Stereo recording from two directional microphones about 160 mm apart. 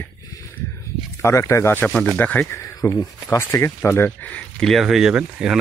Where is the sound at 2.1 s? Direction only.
10° left (ahead or behind).